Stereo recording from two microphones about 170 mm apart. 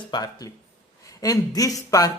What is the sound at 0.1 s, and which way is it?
A man's voice, 20° left (ahead or behind).